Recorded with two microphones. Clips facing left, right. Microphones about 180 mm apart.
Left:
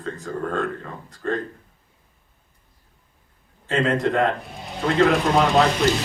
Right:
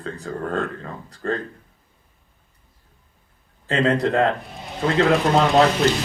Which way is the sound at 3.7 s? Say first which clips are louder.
Right 1 dB; 35° right (ahead or behind).